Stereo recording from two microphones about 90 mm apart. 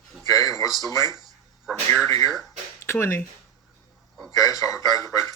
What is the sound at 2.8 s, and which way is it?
Speech, 30° left (ahead or behind).